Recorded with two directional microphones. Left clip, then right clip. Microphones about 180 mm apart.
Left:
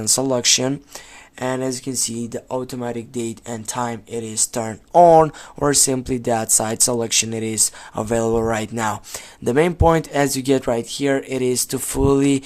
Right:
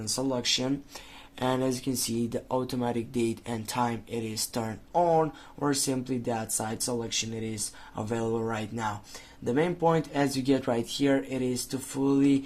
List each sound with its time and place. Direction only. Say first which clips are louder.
0.0 s speech: left 11 dB; 40° left (ahead or behind)
1.4 s speech: left 5 dB; 20° left (ahead or behind)
4.9 s speech: left 14 dB; 45° left (ahead or behind)